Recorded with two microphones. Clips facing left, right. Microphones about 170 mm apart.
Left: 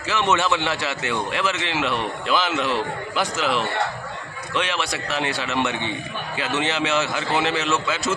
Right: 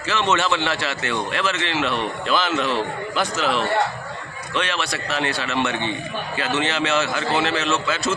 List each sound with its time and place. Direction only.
0.1 s a man's voice: 15° left (ahead or behind)